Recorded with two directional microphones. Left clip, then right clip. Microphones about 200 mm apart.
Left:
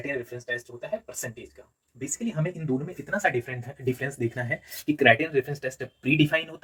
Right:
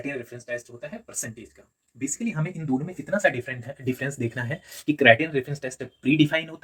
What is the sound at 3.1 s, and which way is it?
Speech, 20° right (ahead or behind).